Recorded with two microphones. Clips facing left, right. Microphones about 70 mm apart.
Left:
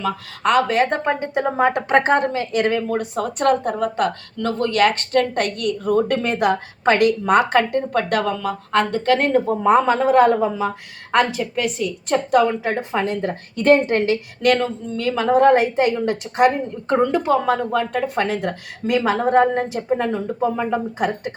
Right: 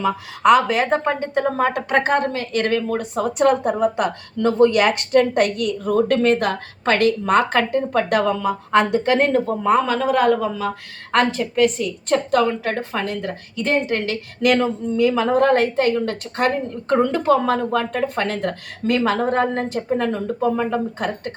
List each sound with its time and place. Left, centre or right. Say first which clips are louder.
0.0 s speech: right 4 dB; centre
9.1 s speech: left 2 dB; centre
9.6 s speech: left 3 dB; left
11.1 s a woman's voice: even; centre; by 13.3 s left
13.6 s a woman's voice: left 6 dB; left
14.4 s a woman's voice: right 1 dB; centre